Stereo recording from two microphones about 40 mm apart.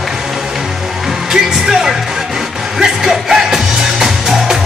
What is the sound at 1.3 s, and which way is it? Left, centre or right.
Music, centre.